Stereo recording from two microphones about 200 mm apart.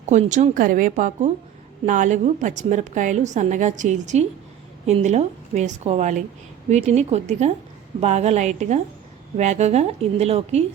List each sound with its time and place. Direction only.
0.0 s a woman's voice: 35° right (ahead or behind)